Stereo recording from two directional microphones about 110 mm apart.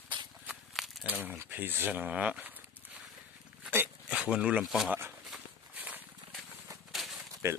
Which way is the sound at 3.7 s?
20° right (ahead or behind).